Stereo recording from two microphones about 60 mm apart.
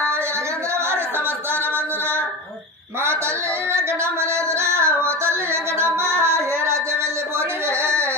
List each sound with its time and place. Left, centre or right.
3.7 s female singing: right